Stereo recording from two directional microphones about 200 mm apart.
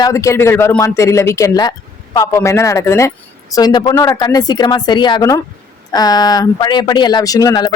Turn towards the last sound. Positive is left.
turn(degrees=20)  # may be behind; listen again after turning